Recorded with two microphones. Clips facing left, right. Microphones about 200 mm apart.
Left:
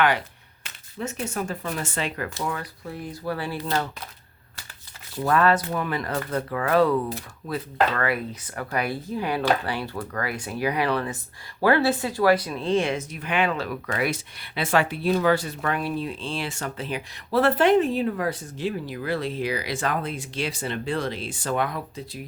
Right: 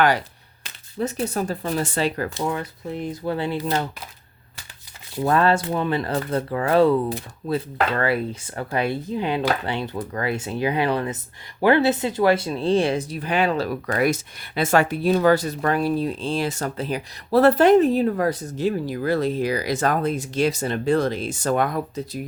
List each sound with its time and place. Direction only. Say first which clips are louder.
0.6 s speech: right 6 dB; 35° right (ahead or behind)
2.5 s speech: right 5 dB; 25° right (ahead or behind)
5.1 s speech: right 2 dB; 25° right (ahead or behind); by 22.2 s 40° right (ahead or behind)